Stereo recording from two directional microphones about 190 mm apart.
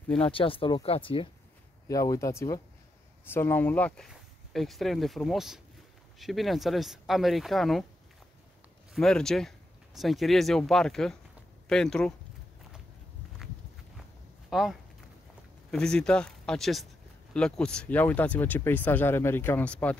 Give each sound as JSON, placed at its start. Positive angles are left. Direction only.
{"t": 0.2, "sound": "speech", "side_deg": 30}
{"t": 1.9, "sound": "speech", "side_deg": 20}
{"t": 8.9, "sound": "speech", "side_deg": 5}
{"t": 14.5, "sound": "speech", "side_deg": 0}